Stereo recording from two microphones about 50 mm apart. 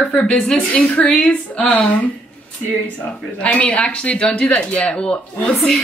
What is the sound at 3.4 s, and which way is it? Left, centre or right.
A man's voice, left.